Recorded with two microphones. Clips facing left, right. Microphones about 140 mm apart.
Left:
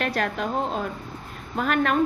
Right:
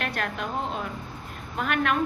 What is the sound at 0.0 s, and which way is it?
Speech, 40° left (ahead or behind).